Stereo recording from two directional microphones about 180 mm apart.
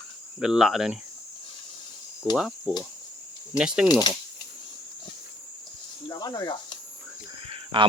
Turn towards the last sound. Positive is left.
turn(degrees=-30)  # may be behind; listen again after turning